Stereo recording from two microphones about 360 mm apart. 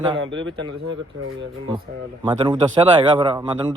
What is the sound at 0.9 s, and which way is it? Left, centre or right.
Speech, right.